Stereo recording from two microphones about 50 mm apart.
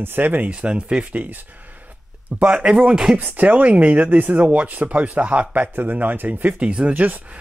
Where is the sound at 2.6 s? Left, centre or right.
Right.